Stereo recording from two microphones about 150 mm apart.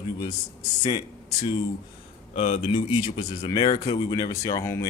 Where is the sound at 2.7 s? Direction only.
30° left (ahead or behind).